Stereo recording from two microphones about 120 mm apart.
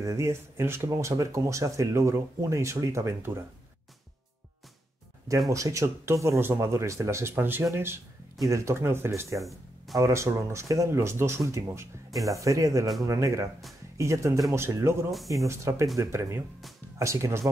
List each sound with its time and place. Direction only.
0.0 s speech: 25° right (ahead or behind)
5.5 s speech: 25° right (ahead or behind)
9.4 s music: centre (ahead or behind)
9.9 s speech: 25° right (ahead or behind)